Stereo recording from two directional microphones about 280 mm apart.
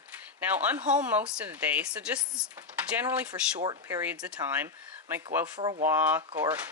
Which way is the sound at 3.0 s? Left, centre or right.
Centre.